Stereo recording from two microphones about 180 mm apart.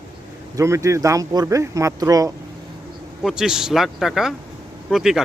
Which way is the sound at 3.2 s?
5° right (ahead or behind).